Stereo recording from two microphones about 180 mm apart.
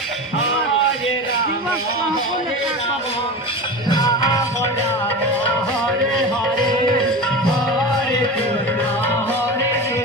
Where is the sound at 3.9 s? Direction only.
20° left (ahead or behind).